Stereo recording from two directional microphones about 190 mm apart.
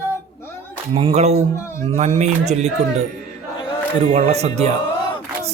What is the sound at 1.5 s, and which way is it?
Speech, 15° left (ahead or behind).